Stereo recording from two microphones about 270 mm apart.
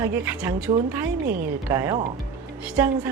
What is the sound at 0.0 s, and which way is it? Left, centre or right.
A woman's voice, centre.